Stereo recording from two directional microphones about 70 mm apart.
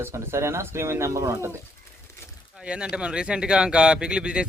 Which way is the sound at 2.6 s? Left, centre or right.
Centre.